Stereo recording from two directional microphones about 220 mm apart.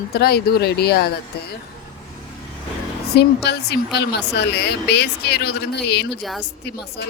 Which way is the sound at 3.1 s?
50° left (ahead or behind).